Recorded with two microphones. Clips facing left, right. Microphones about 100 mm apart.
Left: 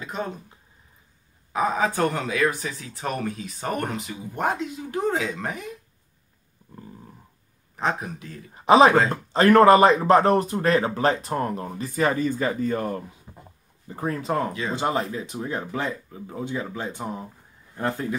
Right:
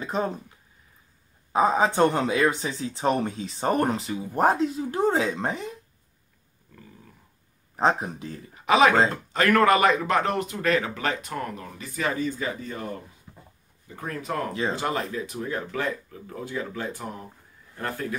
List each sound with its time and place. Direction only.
0.0 s speech: 35° right (ahead or behind)
1.5 s speech: 30° right (ahead or behind)
7.7 s speech: 30° right (ahead or behind)
8.5 s speech: 30° left (ahead or behind); by 13.0 s 50° left (ahead or behind)
13.3 s a sound: 25° left (ahead or behind)
13.9 s speech: 30° left (ahead or behind)